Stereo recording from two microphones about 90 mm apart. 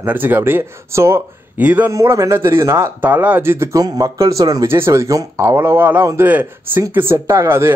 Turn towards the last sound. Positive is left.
turn(degrees=-30)  # may be behind; listen again after turning